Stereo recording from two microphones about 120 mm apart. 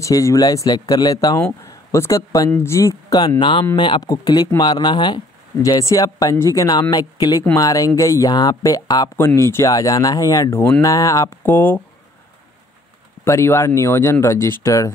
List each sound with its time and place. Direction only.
0.0 s speech: 25° left (ahead or behind)
5.8 s speech: 30° left (ahead or behind)
9.1 s speech: 20° left (ahead or behind)
13.2 s speech: 25° left (ahead or behind)